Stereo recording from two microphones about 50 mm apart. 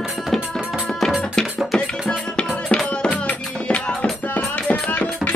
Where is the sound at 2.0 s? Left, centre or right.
Centre.